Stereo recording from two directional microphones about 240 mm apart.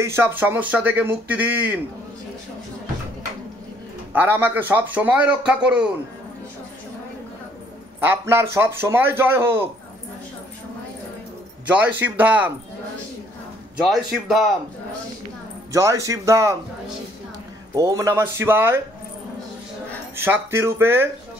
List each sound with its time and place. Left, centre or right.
0.1 s speech: centre
4.1 s speech: centre
8.0 s speech: centre
11.6 s speech: centre
13.8 s a man's voice: centre
15.7 s speech: centre
17.7 s speech: centre
20.2 s speech: centre